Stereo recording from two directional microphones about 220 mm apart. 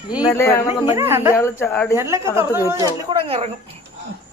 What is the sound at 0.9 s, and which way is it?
Speech, 10° right (ahead or behind).